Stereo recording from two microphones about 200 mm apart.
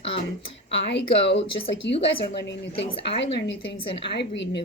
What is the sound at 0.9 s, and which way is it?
A woman's voice, 60° left (ahead or behind).